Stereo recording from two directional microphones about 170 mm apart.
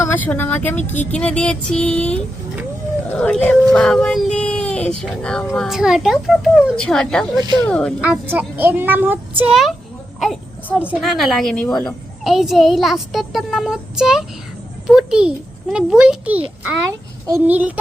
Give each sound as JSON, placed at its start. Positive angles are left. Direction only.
{"t": 0.0, "sound": "speech", "side_deg": 10}
{"t": 7.3, "sound": "speech", "side_deg": -25}
{"t": 7.7, "sound": "speech", "side_deg": 5}
{"t": 8.0, "sound": "a child's voice", "side_deg": -10}